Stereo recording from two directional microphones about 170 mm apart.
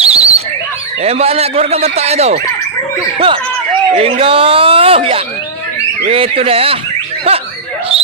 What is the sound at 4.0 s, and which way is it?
Speech, 35° right (ahead or behind).